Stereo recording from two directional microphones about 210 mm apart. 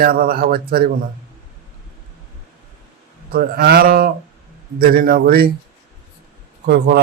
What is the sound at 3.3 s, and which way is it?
A man's voice, 45° right (ahead or behind).